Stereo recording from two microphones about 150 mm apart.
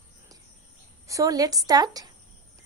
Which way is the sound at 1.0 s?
20° right (ahead or behind).